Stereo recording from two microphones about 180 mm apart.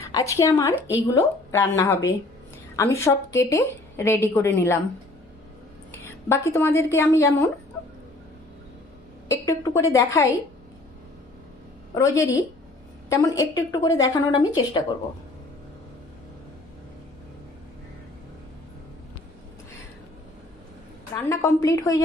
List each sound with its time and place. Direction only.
0.0 s a woman's voice: 20° left (ahead or behind)
5.9 s a woman's voice: 15° left (ahead or behind)
9.3 s a woman's voice: 15° left (ahead or behind)
11.9 s a woman's voice: 15° left (ahead or behind)
21.2 s a woman's voice: 15° left (ahead or behind)